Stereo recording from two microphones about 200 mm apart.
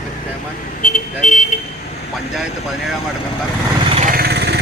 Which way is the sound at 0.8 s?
35° left (ahead or behind).